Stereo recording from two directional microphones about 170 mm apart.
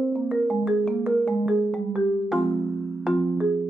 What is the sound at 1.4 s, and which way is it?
Music, centre (ahead or behind).